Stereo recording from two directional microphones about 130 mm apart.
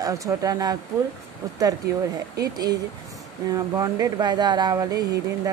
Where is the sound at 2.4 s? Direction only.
30° right (ahead or behind).